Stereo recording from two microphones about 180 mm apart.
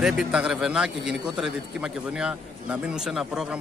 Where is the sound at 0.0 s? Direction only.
5° right (ahead or behind).